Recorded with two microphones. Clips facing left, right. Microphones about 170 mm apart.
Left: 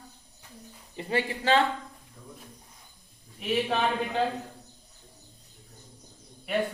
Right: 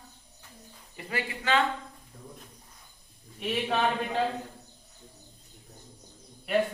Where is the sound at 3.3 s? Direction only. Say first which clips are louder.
Left 1 dB; centre (ahead or behind).